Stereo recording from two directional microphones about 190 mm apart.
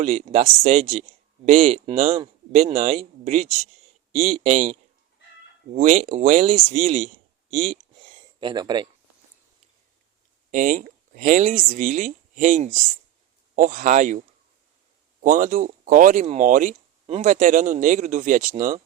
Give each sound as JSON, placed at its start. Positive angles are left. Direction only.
{"t": 0.0, "sound": "speech", "side_deg": -35}
{"t": 10.5, "sound": "speech", "side_deg": -45}
{"t": 15.2, "sound": "speech", "side_deg": -45}